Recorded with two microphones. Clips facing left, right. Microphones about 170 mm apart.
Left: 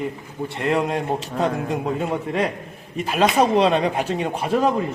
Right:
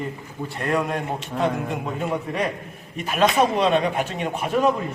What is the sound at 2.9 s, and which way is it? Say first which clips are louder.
Speech: left 1 dB; 35° left (ahead or behind).